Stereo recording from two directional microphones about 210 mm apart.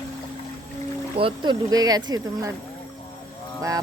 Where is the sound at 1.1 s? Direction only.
25° right (ahead or behind).